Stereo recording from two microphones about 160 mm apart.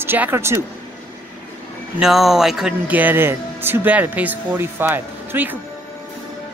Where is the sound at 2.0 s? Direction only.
Centre (ahead or behind).